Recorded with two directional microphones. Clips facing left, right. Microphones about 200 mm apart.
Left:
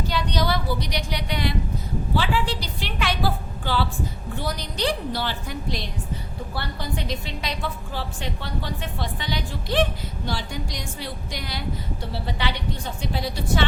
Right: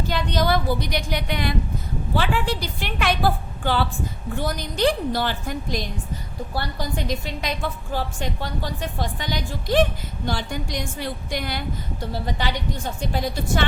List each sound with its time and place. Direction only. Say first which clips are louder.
0.1 s a woman's voice: right 4 dB; 50° right (ahead or behind)